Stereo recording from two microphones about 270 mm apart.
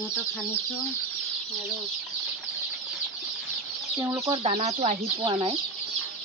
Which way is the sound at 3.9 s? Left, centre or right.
Centre.